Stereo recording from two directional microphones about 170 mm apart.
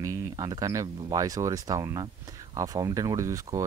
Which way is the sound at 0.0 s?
20° right (ahead or behind).